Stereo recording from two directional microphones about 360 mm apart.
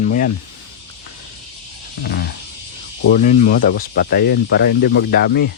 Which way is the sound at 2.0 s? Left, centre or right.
Left.